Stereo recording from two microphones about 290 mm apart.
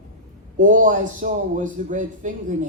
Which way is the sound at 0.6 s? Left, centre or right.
Right.